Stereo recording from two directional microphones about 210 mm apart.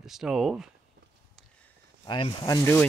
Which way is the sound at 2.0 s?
20° left (ahead or behind).